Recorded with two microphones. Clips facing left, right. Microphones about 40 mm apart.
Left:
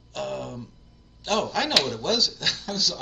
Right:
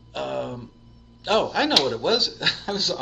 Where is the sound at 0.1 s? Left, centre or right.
Right.